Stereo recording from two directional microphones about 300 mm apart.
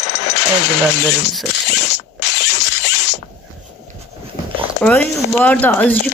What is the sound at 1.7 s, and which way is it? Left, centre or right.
Zipper, left.